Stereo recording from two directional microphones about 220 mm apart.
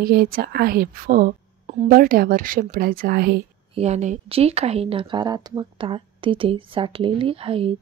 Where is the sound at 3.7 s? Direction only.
30° right (ahead or behind).